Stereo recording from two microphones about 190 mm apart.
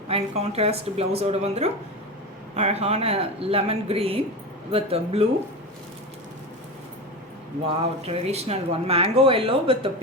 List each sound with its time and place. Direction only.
0.1 s speech: 30° right (ahead or behind)
7.7 s speech: 30° right (ahead or behind)